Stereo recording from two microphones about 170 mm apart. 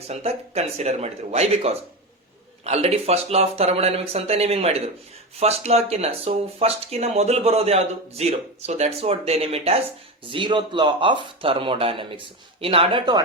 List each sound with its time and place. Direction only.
0.1 s speech: 40° right (ahead or behind)